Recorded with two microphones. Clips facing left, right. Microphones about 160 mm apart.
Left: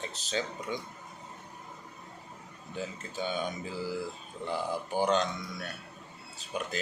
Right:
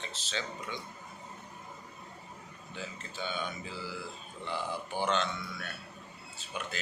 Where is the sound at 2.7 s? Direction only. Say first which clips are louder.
Left 5 dB; 45° left (ahead or behind).